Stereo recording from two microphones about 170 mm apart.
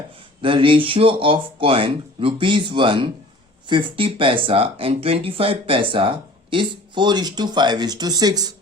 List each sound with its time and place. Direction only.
0.4 s speech: 30° right (ahead or behind)